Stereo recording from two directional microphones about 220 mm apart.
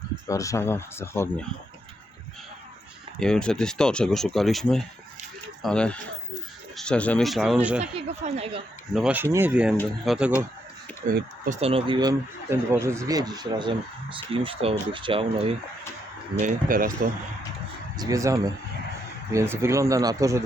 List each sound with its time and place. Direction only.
0.3 s speech: 15° left (ahead or behind)
3.2 s speech: 5° left (ahead or behind)
7.8 s speech: 30° right (ahead or behind)
8.9 s speech: 5° right (ahead or behind)
11.1 s speech: 35° right (ahead or behind)
16.4 s speech: 40° right (ahead or behind)
17.9 s speech: 15° right (ahead or behind)